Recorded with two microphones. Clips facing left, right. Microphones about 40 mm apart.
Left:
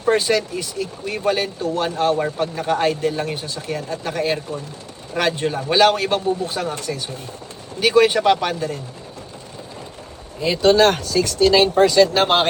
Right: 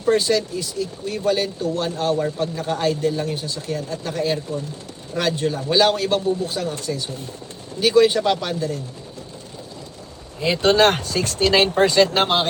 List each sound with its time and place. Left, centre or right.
0.0 s speech: left
6.4 s speech: left
10.5 s speech: right